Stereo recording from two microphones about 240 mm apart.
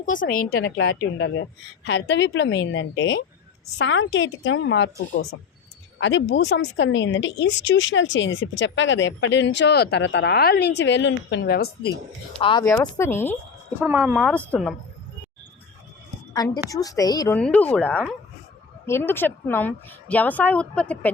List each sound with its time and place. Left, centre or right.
0.0 s speech: left
6.0 s speech: left
12.4 s a woman's voice: centre
13.8 s a woman's voice: centre
16.3 s a woman's voice: centre